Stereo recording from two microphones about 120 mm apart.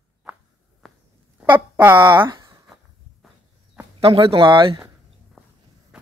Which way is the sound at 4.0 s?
50° right (ahead or behind).